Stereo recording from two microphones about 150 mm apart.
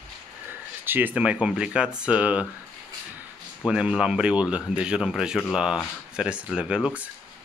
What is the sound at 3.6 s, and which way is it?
Speech, 5° right (ahead or behind).